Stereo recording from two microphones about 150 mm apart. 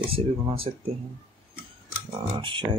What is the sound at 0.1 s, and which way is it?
Speech, 40° right (ahead or behind).